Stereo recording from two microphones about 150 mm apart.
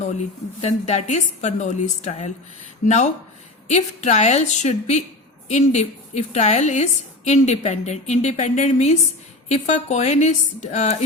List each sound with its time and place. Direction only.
0.6 s a woman's voice: 50° left (ahead or behind)